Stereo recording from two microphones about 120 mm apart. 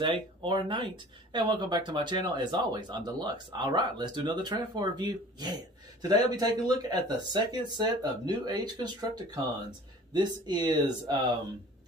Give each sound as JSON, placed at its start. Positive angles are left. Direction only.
{"t": 0.0, "sound": "speech", "side_deg": -45}